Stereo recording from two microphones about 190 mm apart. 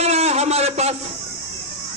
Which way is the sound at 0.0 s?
35° right (ahead or behind).